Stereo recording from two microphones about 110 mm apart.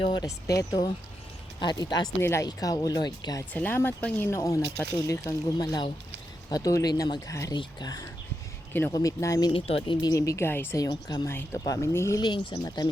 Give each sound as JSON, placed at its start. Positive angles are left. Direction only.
{"t": 0.0, "sound": "speech", "side_deg": 45}
{"t": 0.3, "sound": "speech", "side_deg": 30}
{"t": 2.2, "sound": "speech", "side_deg": 25}
{"t": 2.5, "sound": "speech", "side_deg": 35}
{"t": 3.5, "sound": "speech", "side_deg": 15}
{"t": 7.5, "sound": "speech", "side_deg": 40}
{"t": 9.5, "sound": "speech", "side_deg": 55}
{"t": 10.8, "sound": "speech", "side_deg": 35}
{"t": 11.3, "sound": "speech", "side_deg": 20}
{"t": 12.2, "sound": "speech", "side_deg": 45}